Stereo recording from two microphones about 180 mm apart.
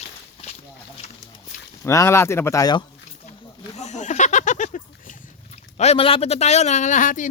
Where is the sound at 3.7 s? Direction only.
40° left (ahead or behind).